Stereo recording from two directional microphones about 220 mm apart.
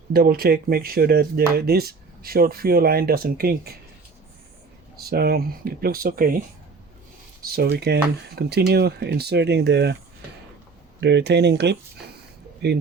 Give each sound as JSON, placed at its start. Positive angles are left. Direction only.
{"t": 0.1, "sound": "speech", "side_deg": -45}
{"t": 4.9, "sound": "speech", "side_deg": -45}
{"t": 7.4, "sound": "speech", "side_deg": -45}
{"t": 11.0, "sound": "speech", "side_deg": -50}